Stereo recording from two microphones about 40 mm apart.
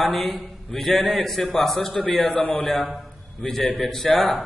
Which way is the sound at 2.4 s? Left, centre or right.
Left.